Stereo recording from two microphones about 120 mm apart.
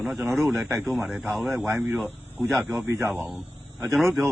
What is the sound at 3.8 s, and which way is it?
Speech, centre (ahead or behind).